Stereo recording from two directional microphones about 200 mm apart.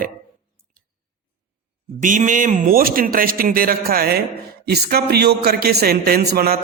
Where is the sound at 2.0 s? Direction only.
40° right (ahead or behind).